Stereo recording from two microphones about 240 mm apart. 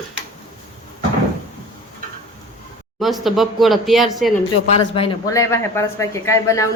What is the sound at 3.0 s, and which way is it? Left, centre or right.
Speech, centre.